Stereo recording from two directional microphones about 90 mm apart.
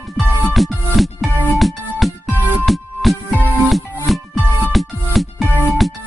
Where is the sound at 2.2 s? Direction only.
20° right (ahead or behind).